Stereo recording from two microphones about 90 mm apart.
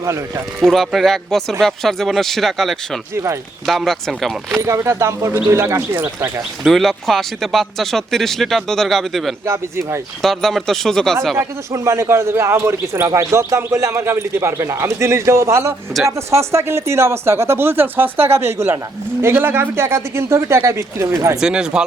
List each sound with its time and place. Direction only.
0.0 s speech: 35° right (ahead or behind)
0.6 s speech: centre (ahead or behind)
4.6 s speech: 30° right (ahead or behind)
6.7 s speech: centre (ahead or behind)
9.5 s speech: 30° right (ahead or behind)
10.2 s speech: 5° left (ahead or behind)
11.3 s speech: 30° right (ahead or behind)
21.4 s speech: 10° right (ahead or behind)